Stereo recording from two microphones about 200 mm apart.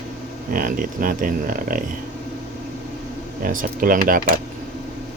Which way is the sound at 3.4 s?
45° right (ahead or behind).